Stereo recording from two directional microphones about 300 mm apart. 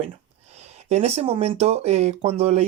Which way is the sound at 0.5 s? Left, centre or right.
Right.